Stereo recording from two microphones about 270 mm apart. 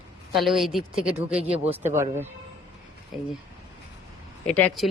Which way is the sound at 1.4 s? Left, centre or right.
Right.